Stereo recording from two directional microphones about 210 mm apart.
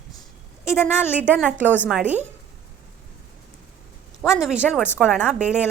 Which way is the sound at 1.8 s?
5° right (ahead or behind).